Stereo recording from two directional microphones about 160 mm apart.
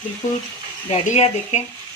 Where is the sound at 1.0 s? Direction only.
45° left (ahead or behind).